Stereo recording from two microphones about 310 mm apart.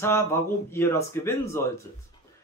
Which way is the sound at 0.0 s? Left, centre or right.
Centre.